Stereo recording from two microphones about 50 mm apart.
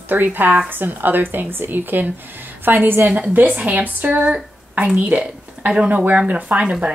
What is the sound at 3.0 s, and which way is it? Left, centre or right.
A woman's voice, right.